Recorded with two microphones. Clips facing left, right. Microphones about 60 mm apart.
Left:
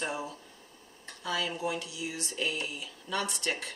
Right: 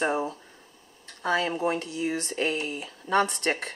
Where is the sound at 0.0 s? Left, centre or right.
Right.